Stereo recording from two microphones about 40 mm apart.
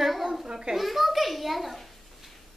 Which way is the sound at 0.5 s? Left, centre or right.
Centre.